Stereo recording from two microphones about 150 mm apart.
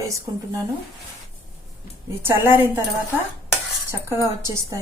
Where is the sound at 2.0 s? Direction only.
15° right (ahead or behind).